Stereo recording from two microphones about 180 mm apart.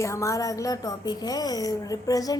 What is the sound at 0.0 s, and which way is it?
A woman's voice, 15° left (ahead or behind).